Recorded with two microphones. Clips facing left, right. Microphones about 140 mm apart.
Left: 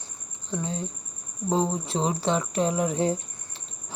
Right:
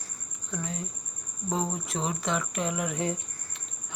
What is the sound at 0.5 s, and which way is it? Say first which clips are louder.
Speech: left 5 dB; 30° left (ahead or behind).